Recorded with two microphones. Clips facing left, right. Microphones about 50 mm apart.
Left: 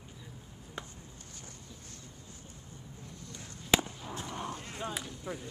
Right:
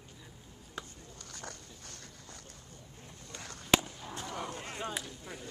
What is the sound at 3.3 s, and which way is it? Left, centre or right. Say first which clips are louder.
Fireworks: right 6 dB; right.